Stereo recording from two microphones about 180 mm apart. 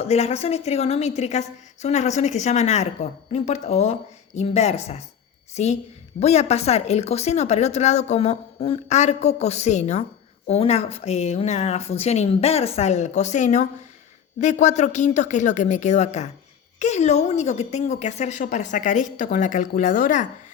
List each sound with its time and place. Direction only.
0.0 s a woman's voice: 35° left (ahead or behind)